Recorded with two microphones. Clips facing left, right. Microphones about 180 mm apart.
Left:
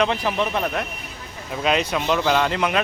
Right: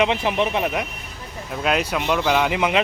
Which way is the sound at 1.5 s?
Centre (ahead or behind).